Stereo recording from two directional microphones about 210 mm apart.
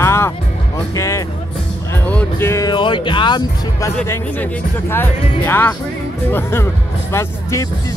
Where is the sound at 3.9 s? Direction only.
10° left (ahead or behind).